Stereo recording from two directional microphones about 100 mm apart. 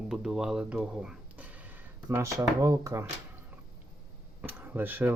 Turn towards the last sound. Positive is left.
turn(degrees=-20)  # may be behind; listen again after turning